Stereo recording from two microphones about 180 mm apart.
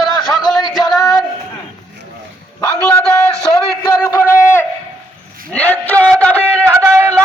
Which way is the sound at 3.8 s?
15° left (ahead or behind).